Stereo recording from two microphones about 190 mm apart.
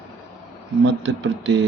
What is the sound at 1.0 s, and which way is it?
Speech, 75° right (ahead or behind).